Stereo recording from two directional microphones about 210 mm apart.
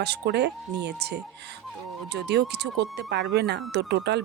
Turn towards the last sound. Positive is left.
turn(degrees=-55)  # may be behind; listen again after turning